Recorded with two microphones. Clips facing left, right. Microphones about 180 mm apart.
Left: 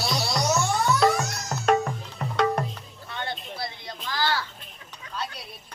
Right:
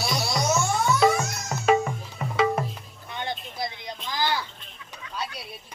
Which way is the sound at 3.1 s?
15° right (ahead or behind).